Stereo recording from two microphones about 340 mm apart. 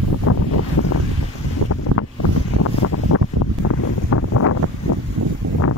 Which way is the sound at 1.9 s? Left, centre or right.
Right.